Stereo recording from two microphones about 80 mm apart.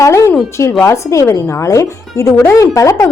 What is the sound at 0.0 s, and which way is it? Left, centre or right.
A woman's voice, left.